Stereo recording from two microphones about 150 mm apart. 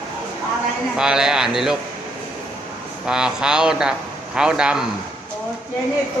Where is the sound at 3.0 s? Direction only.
5° right (ahead or behind).